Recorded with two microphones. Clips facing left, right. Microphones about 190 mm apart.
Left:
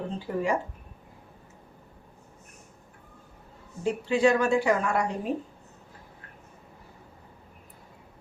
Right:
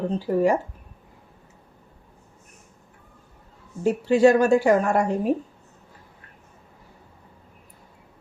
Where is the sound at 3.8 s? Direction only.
45° right (ahead or behind).